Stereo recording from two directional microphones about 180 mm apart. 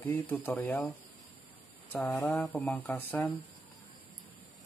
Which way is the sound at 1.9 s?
10° left (ahead or behind).